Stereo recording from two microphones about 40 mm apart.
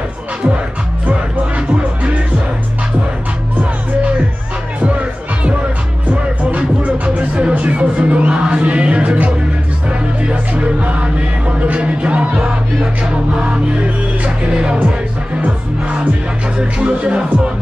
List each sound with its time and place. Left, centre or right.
4.7 s music: right
6.9 s music: right
8.3 s music: right
16.5 s speech: right